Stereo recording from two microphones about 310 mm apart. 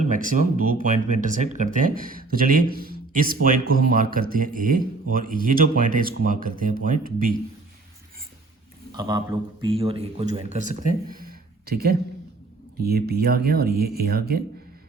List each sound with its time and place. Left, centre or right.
0.0 s speech: right
8.9 s speech: centre; by 14.4 s right